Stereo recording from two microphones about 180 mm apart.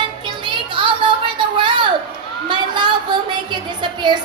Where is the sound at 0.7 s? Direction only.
25° right (ahead or behind).